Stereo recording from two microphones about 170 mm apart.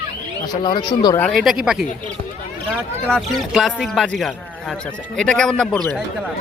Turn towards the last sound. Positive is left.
turn(degrees=5)  # may be behind; listen again after turning